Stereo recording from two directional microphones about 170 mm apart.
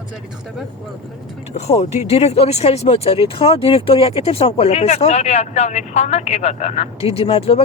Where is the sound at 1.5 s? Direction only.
40° left (ahead or behind).